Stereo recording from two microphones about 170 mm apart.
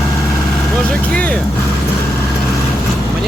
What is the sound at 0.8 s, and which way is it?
Vehicle, 5° left (ahead or behind).